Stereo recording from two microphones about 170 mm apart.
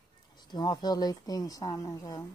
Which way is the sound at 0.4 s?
25° left (ahead or behind).